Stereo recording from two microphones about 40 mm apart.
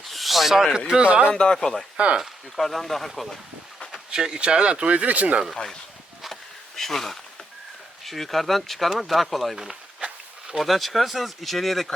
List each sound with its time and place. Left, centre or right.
0.0 s a sound: centre
0.9 s speech: right
1.3 s speech: left
1.5 s speech: centre
4.1 s speech: centre
4.9 s speech: right
6.7 s speech: centre
10.0 s a sound: right
10.6 s speech: centre